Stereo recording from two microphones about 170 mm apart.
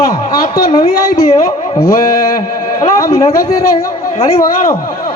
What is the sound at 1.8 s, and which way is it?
Speech, 60° left (ahead or behind).